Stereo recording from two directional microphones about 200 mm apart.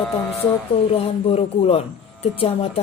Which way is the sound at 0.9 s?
30° left (ahead or behind).